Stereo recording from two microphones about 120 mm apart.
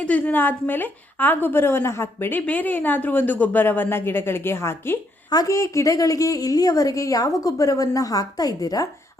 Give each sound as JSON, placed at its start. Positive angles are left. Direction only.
{"t": 0.0, "sound": "a woman's voice", "side_deg": 10}